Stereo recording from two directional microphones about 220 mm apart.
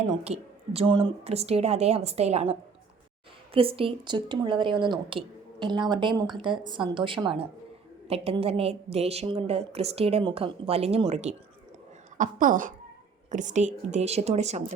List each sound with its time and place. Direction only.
0.0 s a woman's voice: 25° right (ahead or behind)